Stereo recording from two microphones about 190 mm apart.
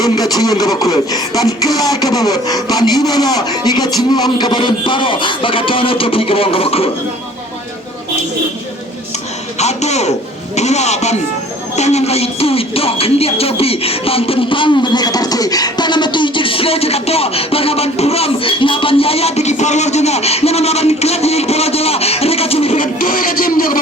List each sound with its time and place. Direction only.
0.0 s speech: 20° left (ahead or behind)
9.6 s speech: 35° left (ahead or behind)
11.8 s music: 35° left (ahead or behind)
22.8 s music: 45° left (ahead or behind)